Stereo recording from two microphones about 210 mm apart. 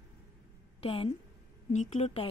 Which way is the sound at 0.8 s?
25° left (ahead or behind).